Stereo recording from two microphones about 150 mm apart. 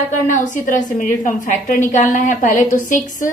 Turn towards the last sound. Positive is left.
turn(degrees=60)  # may be behind; listen again after turning